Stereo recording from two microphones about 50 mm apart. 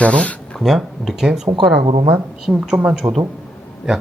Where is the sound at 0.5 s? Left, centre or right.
Centre.